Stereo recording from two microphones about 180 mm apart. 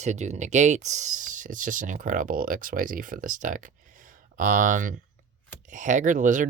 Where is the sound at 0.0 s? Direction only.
40° right (ahead or behind).